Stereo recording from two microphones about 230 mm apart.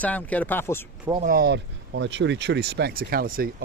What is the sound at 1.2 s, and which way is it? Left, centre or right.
Speech, right.